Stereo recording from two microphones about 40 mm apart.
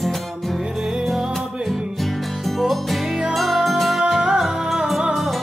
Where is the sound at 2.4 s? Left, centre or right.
Centre.